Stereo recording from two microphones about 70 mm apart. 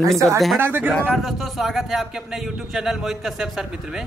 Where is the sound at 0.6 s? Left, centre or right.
Right.